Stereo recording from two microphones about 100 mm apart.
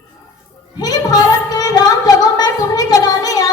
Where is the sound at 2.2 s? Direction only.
40° left (ahead or behind).